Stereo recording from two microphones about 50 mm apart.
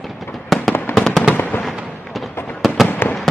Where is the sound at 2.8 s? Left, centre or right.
Left.